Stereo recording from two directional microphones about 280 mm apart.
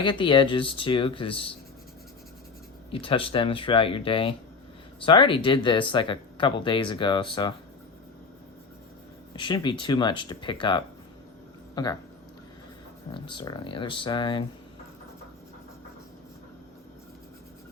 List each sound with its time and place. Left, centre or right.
0.0 s speech: centre
2.9 s speech: centre
9.3 s speech: centre
13.1 s speech: centre